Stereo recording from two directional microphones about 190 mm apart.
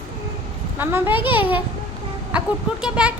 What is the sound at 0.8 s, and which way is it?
Speech, 10° right (ahead or behind).